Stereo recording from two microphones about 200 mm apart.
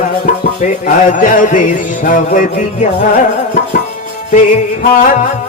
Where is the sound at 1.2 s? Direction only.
40° left (ahead or behind).